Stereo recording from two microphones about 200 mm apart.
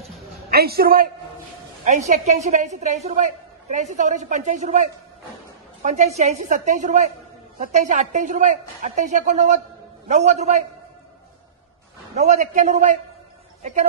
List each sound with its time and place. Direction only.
0.5 s a woman's voice: 50° right (ahead or behind)
1.9 s a woman's voice: 35° right (ahead or behind)
12.2 s a woman's voice: 35° right (ahead or behind)